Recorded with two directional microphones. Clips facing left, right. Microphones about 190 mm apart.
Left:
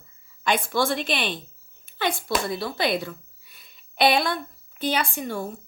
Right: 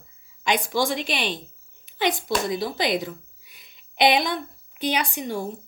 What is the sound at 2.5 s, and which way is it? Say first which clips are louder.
A woman's voice: right 1 dB; 20° right (ahead or behind).